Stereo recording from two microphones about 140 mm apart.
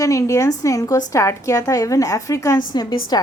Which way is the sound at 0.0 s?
25° left (ahead or behind).